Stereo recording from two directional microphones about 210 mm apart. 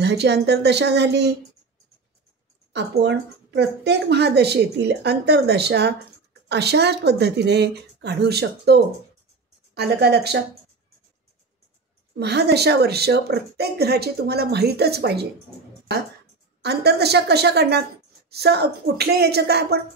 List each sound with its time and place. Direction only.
0.0 s speech: 55° right (ahead or behind)
2.7 s speech: 55° right (ahead or behind)
12.2 s speech: 50° right (ahead or behind)
16.6 s speech: 50° right (ahead or behind)